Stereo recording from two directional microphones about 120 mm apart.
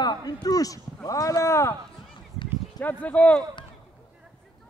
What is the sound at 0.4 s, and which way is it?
Speech, 30° left (ahead or behind).